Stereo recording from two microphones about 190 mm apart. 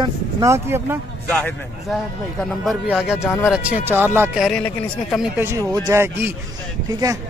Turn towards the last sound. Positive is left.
turn(degrees=-20)  # may be behind; listen again after turning